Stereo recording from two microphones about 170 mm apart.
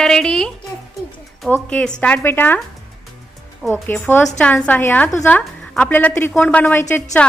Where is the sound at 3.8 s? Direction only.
10° left (ahead or behind).